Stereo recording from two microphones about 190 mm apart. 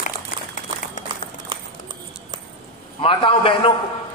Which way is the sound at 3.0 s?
30° left (ahead or behind).